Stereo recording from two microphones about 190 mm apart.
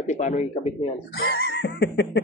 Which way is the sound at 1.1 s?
55° left (ahead or behind).